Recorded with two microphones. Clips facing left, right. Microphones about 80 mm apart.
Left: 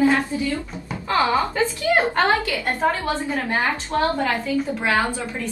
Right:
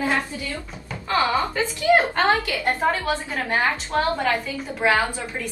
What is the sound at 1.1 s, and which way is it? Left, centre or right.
Speech, left.